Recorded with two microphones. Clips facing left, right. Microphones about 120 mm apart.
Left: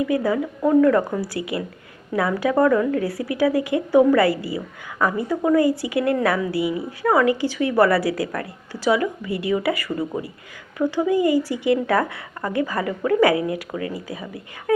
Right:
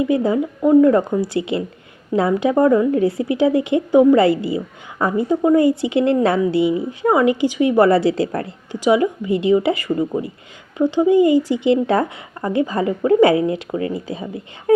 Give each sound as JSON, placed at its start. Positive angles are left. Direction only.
{"t": 0.0, "sound": "speech", "side_deg": -25}